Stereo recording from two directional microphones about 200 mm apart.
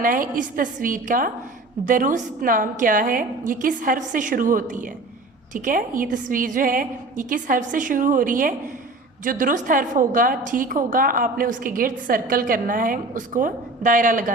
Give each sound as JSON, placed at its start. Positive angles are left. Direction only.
{"t": 0.0, "sound": "a woman's voice", "side_deg": -45}